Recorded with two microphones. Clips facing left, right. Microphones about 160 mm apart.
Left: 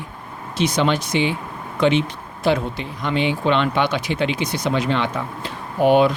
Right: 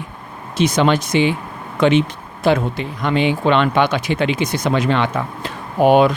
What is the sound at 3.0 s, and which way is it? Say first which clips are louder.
Speech: right 3 dB; 65° right (ahead or behind).